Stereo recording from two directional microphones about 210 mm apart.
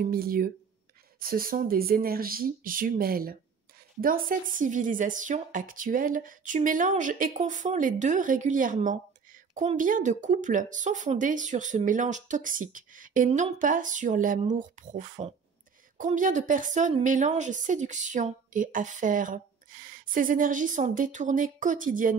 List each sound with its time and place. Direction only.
0.0 s a woman's voice: 45° right (ahead or behind)